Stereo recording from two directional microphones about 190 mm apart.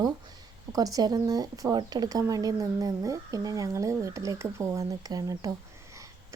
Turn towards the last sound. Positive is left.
turn(degrees=-20)  # may be behind; listen again after turning